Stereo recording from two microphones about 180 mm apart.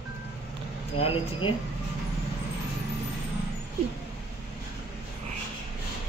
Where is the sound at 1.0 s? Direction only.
30° left (ahead or behind).